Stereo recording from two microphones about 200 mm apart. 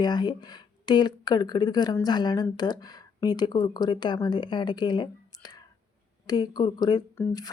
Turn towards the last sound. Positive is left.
turn(degrees=20)  # may be behind; listen again after turning